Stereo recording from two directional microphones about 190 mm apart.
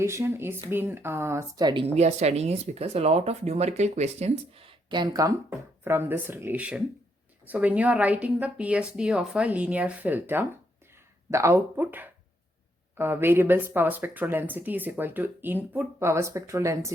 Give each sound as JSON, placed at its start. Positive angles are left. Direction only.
{"t": 0.0, "sound": "speech", "side_deg": -15}